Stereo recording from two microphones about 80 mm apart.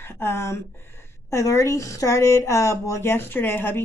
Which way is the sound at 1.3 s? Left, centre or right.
Left.